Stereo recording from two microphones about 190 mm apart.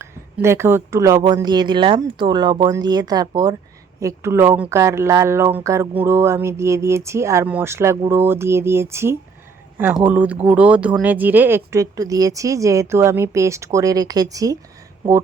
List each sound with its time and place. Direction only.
0.0 s speech: 15° right (ahead or behind)